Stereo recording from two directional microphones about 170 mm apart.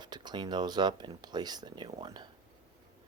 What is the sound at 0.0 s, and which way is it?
Speech, 25° right (ahead or behind).